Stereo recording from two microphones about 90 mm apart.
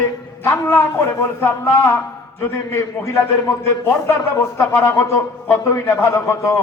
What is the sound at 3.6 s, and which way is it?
A man's voice, 35° left (ahead or behind).